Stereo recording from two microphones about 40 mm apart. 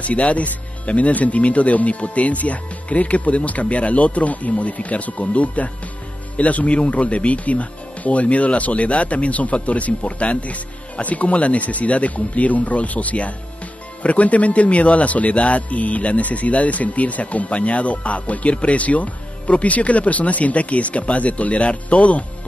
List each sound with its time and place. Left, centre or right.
0.0 s a man's voice: left